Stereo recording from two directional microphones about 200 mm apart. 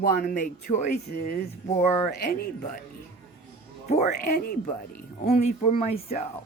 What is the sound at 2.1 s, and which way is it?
Speech, 50° left (ahead or behind).